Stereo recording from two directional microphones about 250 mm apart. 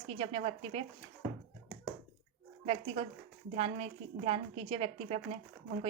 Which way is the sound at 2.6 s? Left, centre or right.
Right.